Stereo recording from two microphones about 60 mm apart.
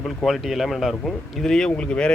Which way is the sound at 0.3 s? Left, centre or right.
Centre.